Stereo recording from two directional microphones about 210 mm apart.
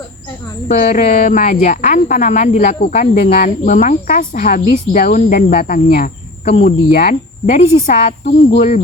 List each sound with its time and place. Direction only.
0.7 s speech: 35° left (ahead or behind)